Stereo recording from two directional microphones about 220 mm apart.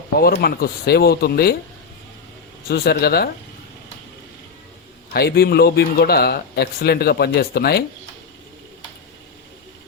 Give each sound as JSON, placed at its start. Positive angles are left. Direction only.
{"t": 0.2, "sound": "speech", "side_deg": 45}
{"t": 2.6, "sound": "speech", "side_deg": 45}
{"t": 5.1, "sound": "speech", "side_deg": 45}